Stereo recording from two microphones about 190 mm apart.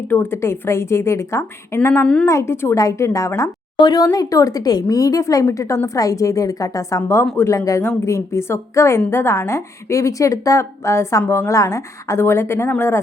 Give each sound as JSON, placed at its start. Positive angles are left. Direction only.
{"t": 0.1, "sound": "a woman's voice", "side_deg": 10}